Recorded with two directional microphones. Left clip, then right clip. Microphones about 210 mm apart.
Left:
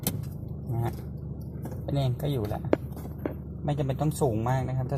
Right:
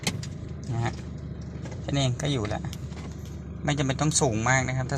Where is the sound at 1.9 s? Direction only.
15° right (ahead or behind).